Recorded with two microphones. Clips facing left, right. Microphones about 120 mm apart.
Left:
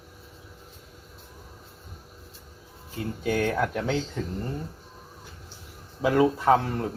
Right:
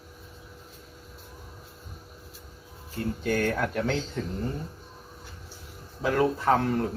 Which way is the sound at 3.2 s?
10° left (ahead or behind).